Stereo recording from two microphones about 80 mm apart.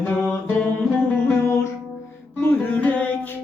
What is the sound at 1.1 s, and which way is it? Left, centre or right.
Music, left.